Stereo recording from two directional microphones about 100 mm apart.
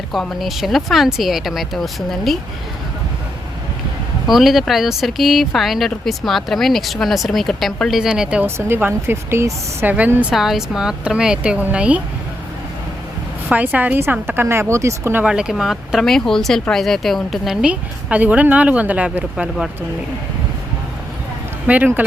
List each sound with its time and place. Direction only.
0.1 s speech: centre (ahead or behind)
4.3 s speech: centre (ahead or behind)
8.4 s speech: 25° right (ahead or behind)
10.1 s speech: 15° right (ahead or behind)
10.3 s speech: centre (ahead or behind)
13.5 s speech: 15° right (ahead or behind)
15.2 s speech: 10° right (ahead or behind)
21.7 s speech: 15° right (ahead or behind)